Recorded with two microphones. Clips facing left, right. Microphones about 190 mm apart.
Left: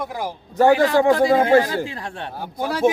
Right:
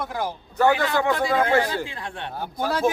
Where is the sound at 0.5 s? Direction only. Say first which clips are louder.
Left 6 dB; 35° left (ahead or behind).